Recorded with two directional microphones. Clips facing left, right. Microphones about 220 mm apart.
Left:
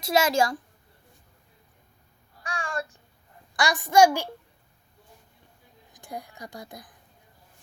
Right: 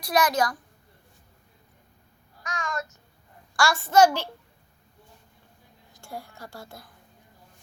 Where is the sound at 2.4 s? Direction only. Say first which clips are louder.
Even; 30° left (ahead or behind).